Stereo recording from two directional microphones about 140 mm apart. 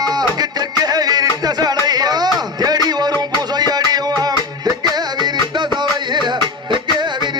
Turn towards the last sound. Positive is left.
turn(degrees=-30)  # may be behind; listen again after turning